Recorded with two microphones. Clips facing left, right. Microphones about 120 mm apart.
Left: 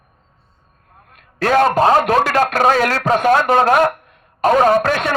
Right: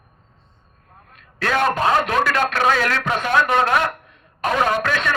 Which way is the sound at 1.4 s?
35° left (ahead or behind).